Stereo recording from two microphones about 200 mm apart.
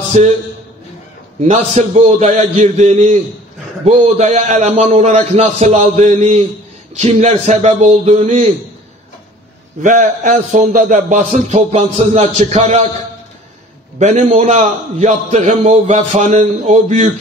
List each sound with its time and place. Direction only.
0.1 s a man's voice: 35° right (ahead or behind)
1.4 s a man's voice: 35° right (ahead or behind)
9.8 s a man's voice: 40° right (ahead or behind)
13.9 s a man's voice: 35° right (ahead or behind)